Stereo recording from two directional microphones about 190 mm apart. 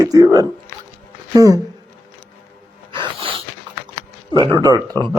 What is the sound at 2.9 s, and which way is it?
Music, 25° right (ahead or behind).